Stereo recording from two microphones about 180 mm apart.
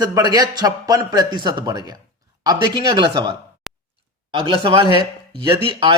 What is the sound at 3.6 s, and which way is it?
Tick, centre (ahead or behind).